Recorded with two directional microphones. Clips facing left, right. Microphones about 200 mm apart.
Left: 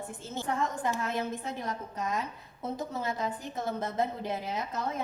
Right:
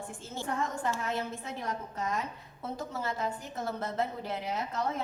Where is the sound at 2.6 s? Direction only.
20° left (ahead or behind).